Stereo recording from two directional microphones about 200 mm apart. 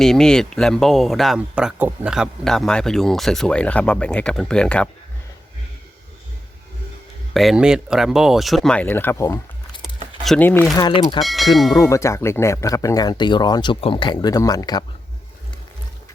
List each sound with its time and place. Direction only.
0.0 s speech: 5° left (ahead or behind)
7.3 s speech: centre (ahead or behind)
10.8 s speech: 25° left (ahead or behind)
11.2 s speech: centre (ahead or behind)
11.7 s speech: 15° left (ahead or behind)